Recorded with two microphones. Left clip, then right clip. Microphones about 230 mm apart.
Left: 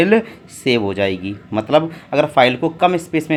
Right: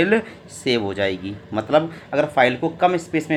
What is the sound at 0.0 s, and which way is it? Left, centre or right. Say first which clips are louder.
Speech: left 4 dB; left.